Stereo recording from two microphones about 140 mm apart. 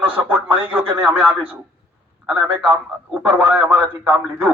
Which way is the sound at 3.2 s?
10° right (ahead or behind).